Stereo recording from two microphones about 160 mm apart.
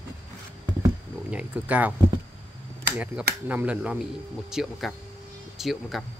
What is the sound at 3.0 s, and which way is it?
Speech, 10° right (ahead or behind).